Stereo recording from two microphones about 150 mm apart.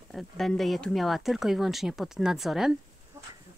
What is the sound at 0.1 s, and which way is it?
Speech, centre (ahead or behind).